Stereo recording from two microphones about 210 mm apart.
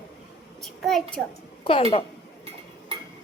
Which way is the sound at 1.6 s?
25° left (ahead or behind).